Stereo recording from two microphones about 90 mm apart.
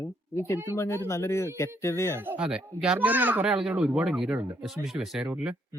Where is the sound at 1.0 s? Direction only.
30° left (ahead or behind).